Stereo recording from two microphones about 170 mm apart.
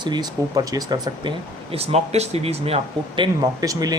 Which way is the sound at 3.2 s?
20° right (ahead or behind).